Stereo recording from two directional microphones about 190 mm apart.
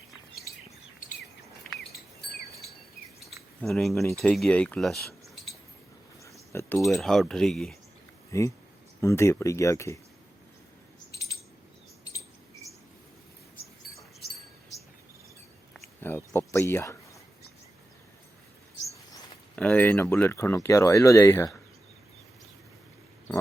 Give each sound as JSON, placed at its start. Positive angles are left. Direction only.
{"t": 3.6, "sound": "speech", "side_deg": 0}
{"t": 6.5, "sound": "speech", "side_deg": 15}
{"t": 6.7, "sound": "speech", "side_deg": 0}
{"t": 8.3, "sound": "speech", "side_deg": 15}
{"t": 16.0, "sound": "speech", "side_deg": 10}
{"t": 19.5, "sound": "speech", "side_deg": 5}